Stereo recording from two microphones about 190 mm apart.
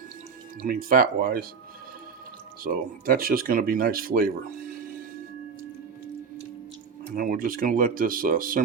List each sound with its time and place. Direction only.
0.6 s speech: 50° right (ahead or behind)
2.6 s speech: 50° right (ahead or behind)
7.2 s speech: 45° right (ahead or behind)